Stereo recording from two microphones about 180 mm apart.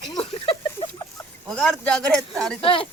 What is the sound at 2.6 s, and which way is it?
Speech, 30° left (ahead or behind).